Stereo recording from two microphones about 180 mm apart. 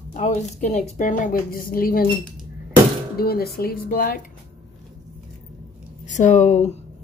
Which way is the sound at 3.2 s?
55° left (ahead or behind).